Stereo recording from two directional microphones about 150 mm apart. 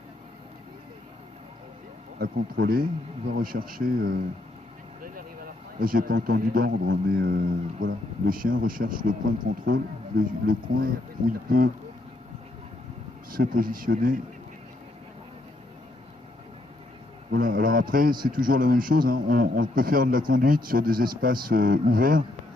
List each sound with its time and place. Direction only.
2.1 s a man's voice: 75° right (ahead or behind)
5.8 s a man's voice: 70° right (ahead or behind)
13.3 s a man's voice: 70° right (ahead or behind)
17.3 s a man's voice: 70° right (ahead or behind)